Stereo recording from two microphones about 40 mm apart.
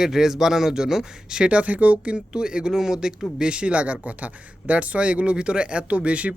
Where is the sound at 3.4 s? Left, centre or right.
Right.